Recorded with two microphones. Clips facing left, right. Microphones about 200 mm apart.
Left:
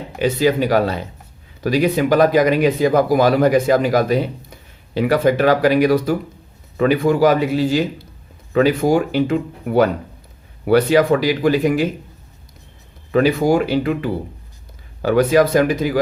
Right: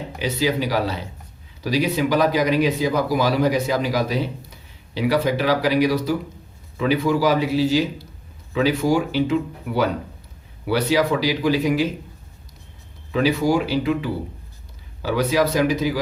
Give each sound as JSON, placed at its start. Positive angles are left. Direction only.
{"t": 0.2, "sound": "speech", "side_deg": 55}
{"t": 13.1, "sound": "speech", "side_deg": 55}